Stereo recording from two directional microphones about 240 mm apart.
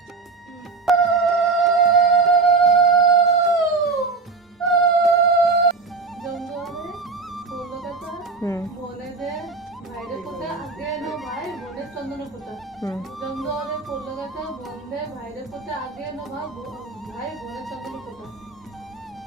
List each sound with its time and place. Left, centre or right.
0.9 s music: centre
10.0 s a sound: centre
12.9 s music: centre
17.4 s music: centre